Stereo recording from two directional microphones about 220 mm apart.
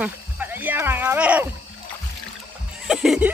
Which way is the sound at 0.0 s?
10° right (ahead or behind).